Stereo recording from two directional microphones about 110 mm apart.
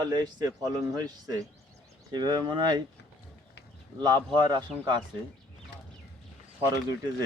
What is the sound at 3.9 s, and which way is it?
Speech, 40° right (ahead or behind).